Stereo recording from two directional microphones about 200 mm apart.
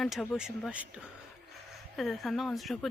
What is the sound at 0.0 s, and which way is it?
Speech, centre (ahead or behind).